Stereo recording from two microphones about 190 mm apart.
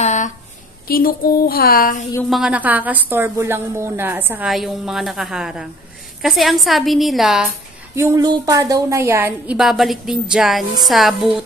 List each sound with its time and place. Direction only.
0.0 s a sound: 40° left (ahead or behind)
0.8 s a woman's voice: 50° left (ahead or behind)
2.2 s a woman's voice: centre (ahead or behind)
7.9 s a woman's voice: 15° right (ahead or behind)
9.6 s a woman's voice: centre (ahead or behind)